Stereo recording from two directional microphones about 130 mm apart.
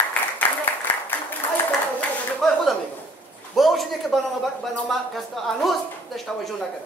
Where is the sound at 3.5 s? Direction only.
Centre (ahead or behind).